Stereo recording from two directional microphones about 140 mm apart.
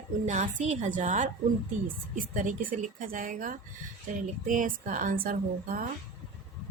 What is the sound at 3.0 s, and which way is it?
A woman's voice, 75° right (ahead or behind).